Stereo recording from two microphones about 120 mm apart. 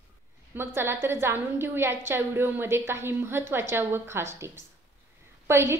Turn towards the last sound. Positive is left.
turn(degrees=-20)  # may be behind; listen again after turning